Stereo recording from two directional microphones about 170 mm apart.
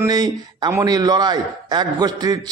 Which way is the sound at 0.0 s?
25° right (ahead or behind).